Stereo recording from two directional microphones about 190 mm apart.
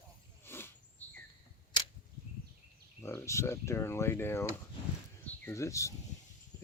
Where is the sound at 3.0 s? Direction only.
15° left (ahead or behind).